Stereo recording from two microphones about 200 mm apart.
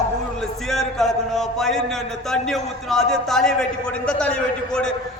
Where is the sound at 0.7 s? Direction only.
Centre (ahead or behind).